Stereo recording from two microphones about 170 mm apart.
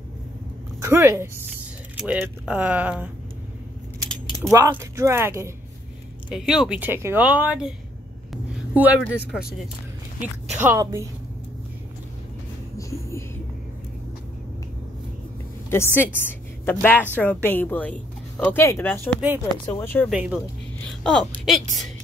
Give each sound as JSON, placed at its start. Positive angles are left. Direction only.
{"t": 0.7, "sound": "speech", "side_deg": -15}
{"t": 4.5, "sound": "speech", "side_deg": -20}
{"t": 6.2, "sound": "speech", "side_deg": -5}
{"t": 8.3, "sound": "a sound", "side_deg": -5}
{"t": 9.3, "sound": "speech", "side_deg": -5}
{"t": 15.7, "sound": "a woman's voice", "side_deg": 15}
{"t": 20.1, "sound": "speech", "side_deg": -5}
{"t": 21.0, "sound": "speech", "side_deg": 5}